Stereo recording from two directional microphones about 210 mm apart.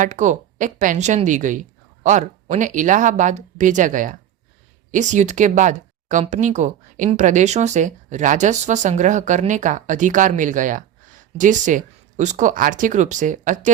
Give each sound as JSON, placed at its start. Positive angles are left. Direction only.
{"t": 0.0, "sound": "speech", "side_deg": -35}